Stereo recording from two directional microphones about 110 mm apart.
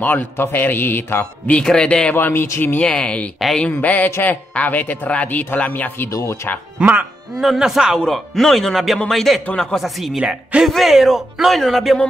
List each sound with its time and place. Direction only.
0.0 s a man's voice: 15° left (ahead or behind)
1.6 s a man's voice: 5° left (ahead or behind)
6.1 s speech: 25° left (ahead or behind)
6.8 s speech: 10° right (ahead or behind)